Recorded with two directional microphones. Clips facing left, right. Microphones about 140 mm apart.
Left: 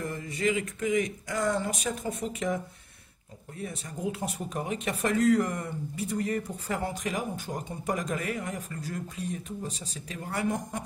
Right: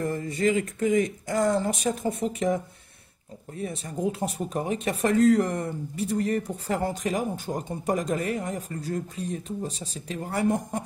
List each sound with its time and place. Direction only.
0.0 s speech: 35° right (ahead or behind)
3.6 s speech: 35° right (ahead or behind)